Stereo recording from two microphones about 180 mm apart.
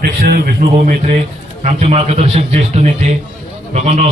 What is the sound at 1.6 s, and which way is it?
A man's voice, 35° right (ahead or behind).